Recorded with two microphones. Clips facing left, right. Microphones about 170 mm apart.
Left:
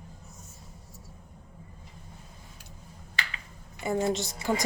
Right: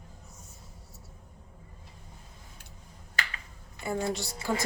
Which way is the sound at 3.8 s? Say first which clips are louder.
Left 4 dB; 20° left (ahead or behind).